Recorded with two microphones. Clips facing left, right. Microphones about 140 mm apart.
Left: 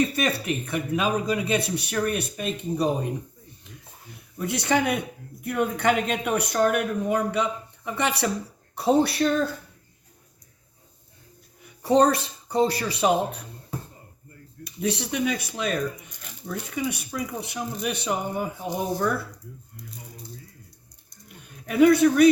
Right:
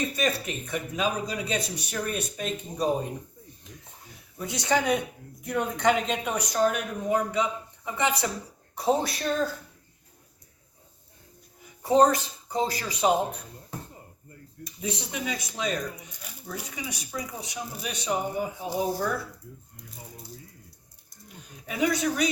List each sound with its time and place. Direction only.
0.2 s speech: 65° left (ahead or behind)
4.1 s speech: 60° left (ahead or behind)
11.8 s speech: 70° left (ahead or behind)
14.6 s speech: 70° left (ahead or behind)
21.4 s a man's voice: 60° left (ahead or behind)